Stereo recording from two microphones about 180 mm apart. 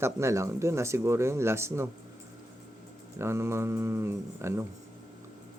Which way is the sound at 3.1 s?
15° right (ahead or behind).